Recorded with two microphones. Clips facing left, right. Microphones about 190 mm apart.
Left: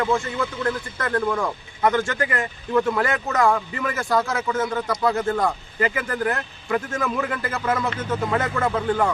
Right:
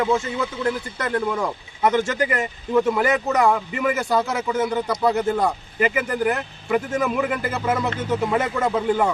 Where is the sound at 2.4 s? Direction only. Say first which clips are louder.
Right 1 dB; 5° right (ahead or behind).